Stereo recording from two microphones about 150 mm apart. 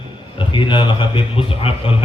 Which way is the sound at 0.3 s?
35° left (ahead or behind).